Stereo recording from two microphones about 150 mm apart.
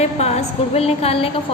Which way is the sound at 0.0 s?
45° left (ahead or behind).